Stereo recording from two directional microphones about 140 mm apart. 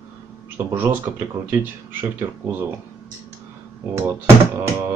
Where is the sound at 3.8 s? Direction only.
15° right (ahead or behind).